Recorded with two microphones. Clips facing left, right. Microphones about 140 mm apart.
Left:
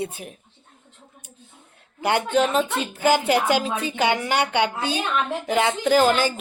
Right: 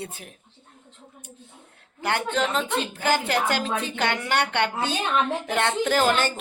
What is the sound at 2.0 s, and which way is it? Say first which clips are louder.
A woman's voice: left 5 dB; 15° left (ahead or behind).